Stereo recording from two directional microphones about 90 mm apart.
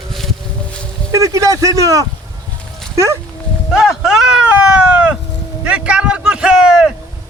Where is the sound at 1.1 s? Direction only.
35° right (ahead or behind).